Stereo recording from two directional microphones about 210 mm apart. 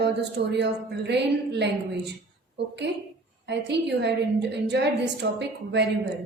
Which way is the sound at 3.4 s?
55° right (ahead or behind).